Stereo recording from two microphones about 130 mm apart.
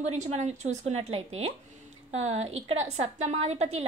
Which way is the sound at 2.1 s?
60° right (ahead or behind).